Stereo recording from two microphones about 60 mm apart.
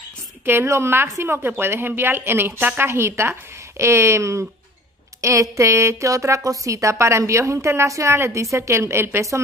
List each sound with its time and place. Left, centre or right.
0.5 s a woman's voice: right